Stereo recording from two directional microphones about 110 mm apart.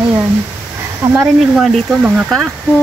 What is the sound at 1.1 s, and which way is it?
Speech, 10° right (ahead or behind).